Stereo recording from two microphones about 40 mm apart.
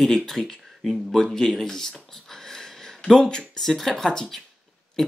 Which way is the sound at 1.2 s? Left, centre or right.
Centre.